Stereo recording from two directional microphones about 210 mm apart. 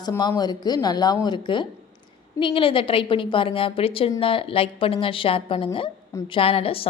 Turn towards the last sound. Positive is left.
turn(degrees=25)  # may be behind; listen again after turning